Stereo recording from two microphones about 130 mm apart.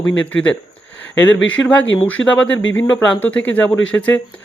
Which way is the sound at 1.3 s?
10° left (ahead or behind).